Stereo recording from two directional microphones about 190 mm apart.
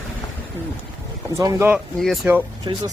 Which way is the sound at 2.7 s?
25° right (ahead or behind).